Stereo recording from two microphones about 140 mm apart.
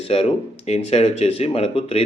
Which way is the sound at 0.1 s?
45° left (ahead or behind).